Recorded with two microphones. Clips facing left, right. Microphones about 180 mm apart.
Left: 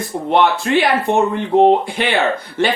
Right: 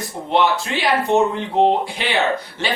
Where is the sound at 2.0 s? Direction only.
55° left (ahead or behind).